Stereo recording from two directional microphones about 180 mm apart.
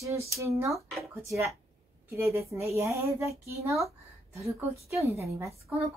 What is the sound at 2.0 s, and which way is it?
A woman's voice, 15° right (ahead or behind).